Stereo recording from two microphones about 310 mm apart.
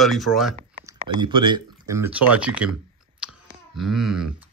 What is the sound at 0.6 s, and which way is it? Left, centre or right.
Speech, centre.